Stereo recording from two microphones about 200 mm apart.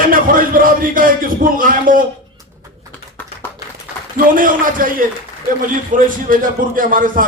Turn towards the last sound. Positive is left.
turn(degrees=-45)  # may be behind; listen again after turning